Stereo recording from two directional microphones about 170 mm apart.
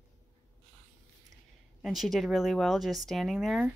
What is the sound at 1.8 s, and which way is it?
Speech, centre (ahead or behind).